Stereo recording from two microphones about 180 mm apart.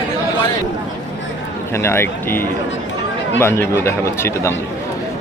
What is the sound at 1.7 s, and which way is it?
Speech, 15° left (ahead or behind).